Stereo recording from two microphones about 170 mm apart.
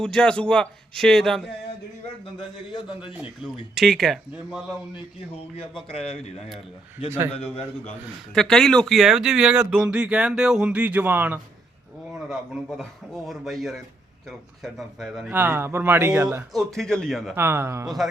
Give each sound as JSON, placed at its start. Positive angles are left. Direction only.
{"t": 0.0, "sound": "speech", "side_deg": 5}
{"t": 3.1, "sound": "speech", "side_deg": -5}
{"t": 6.1, "sound": "speech", "side_deg": 40}
{"t": 8.4, "sound": "speech", "side_deg": 5}
{"t": 12.3, "sound": "speech", "side_deg": 0}
{"t": 15.3, "sound": "speech", "side_deg": -10}
{"t": 16.7, "sound": "speech", "side_deg": 5}
{"t": 17.3, "sound": "speech", "side_deg": -15}
{"t": 17.8, "sound": "speech", "side_deg": 0}